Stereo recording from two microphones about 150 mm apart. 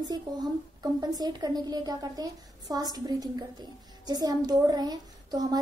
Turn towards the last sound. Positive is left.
turn(degrees=-25)  # may be behind; listen again after turning